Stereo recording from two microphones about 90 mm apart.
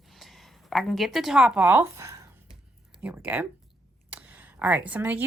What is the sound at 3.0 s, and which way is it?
Speech, 15° right (ahead or behind).